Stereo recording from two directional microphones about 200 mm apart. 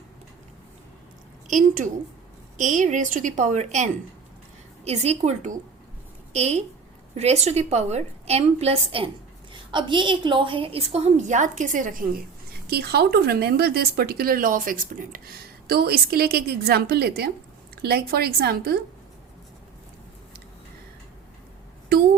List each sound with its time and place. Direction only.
1.5 s a woman's voice: 40° right (ahead or behind)
4.9 s a woman's voice: 35° right (ahead or behind); by 18.8 s 50° right (ahead or behind)